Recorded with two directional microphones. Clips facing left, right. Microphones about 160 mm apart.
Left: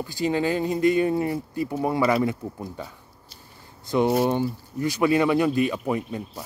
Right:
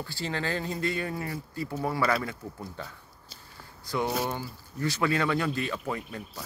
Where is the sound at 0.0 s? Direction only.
15° left (ahead or behind).